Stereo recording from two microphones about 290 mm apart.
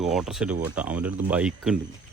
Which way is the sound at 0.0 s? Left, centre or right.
Centre.